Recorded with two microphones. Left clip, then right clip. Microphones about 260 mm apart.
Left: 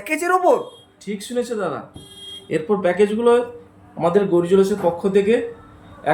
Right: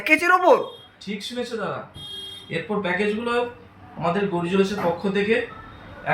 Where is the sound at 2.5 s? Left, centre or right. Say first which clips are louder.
Left 6 dB; centre.